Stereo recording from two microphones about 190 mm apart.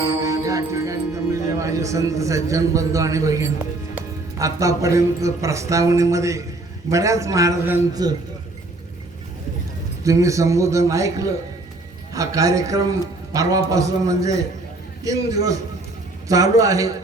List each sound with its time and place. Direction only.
0.0 s music: 15° right (ahead or behind)
1.5 s a man's voice: 15° right (ahead or behind)
10.0 s a man's voice: 15° right (ahead or behind)